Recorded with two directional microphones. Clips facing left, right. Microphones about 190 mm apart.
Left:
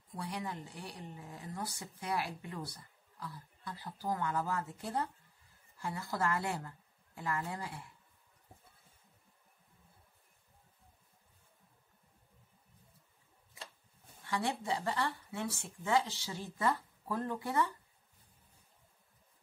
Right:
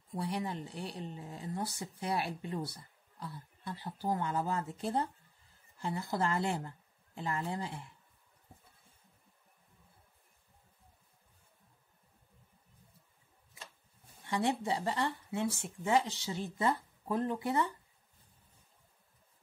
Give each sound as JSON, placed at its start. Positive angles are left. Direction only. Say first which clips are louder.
{"t": 0.1, "sound": "speech", "louder": "right 4 dB", "side_deg": -25}
{"t": 14.2, "sound": "speech", "louder": "right 4 dB", "side_deg": -20}